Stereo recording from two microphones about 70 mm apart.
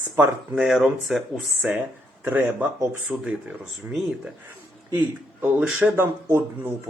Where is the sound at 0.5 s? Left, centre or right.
Centre.